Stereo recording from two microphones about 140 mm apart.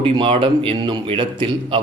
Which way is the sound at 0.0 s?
40° right (ahead or behind).